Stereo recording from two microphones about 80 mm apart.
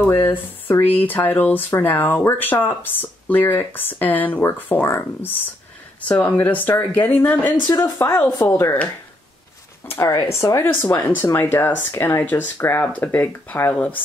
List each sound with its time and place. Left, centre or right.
0.0 s speech: left
7.6 s speech: left
8.0 s speech: left
10.0 s speech: left
10.8 s speech: left